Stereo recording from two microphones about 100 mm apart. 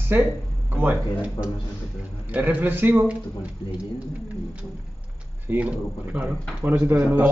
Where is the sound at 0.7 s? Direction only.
20° right (ahead or behind).